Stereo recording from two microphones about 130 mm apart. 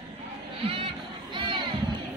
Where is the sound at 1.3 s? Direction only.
40° right (ahead or behind).